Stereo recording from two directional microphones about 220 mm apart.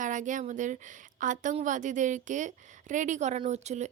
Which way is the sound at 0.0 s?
35° right (ahead or behind).